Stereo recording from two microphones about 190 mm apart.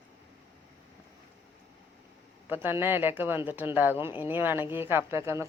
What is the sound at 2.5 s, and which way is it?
Speech, 10° right (ahead or behind).